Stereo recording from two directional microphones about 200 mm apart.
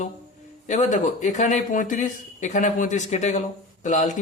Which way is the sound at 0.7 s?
40° left (ahead or behind).